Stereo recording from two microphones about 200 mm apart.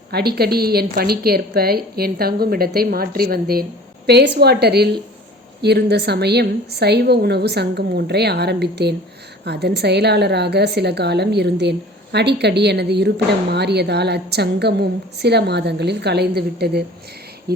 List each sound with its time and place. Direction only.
0.1 s a woman's voice: 50° right (ahead or behind)